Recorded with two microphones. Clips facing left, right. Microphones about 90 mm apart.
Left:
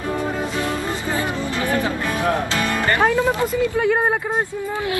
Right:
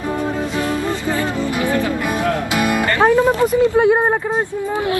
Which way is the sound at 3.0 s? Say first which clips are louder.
Right 6 dB; 20° right (ahead or behind).